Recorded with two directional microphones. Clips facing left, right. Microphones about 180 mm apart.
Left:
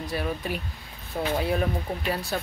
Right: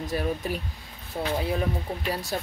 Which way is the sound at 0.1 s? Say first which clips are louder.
Right 2 dB; 40° right (ahead or behind).